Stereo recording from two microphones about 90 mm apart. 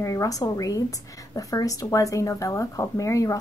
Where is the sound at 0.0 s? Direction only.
40° left (ahead or behind).